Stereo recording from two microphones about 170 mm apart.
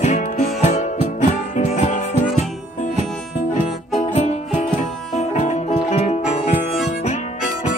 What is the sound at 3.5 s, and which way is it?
Music, 40° left (ahead or behind).